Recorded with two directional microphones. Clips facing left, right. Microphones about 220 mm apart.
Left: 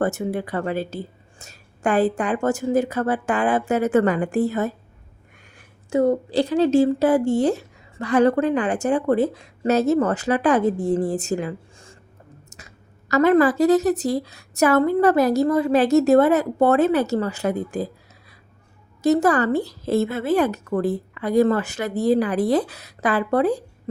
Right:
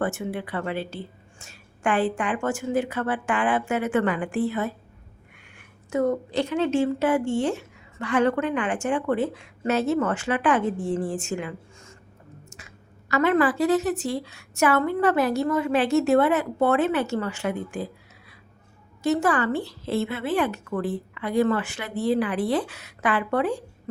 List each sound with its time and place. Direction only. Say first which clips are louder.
0.0 s a woman's voice: left 5 dB; 40° left (ahead or behind)
5.5 s a woman's voice: left 5 dB; 30° left (ahead or behind)
19.0 s a woman's voice: left 5 dB; 40° left (ahead or behind)